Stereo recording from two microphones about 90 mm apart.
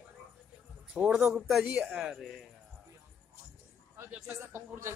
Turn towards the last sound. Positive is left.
turn(degrees=-15)  # may be behind; listen again after turning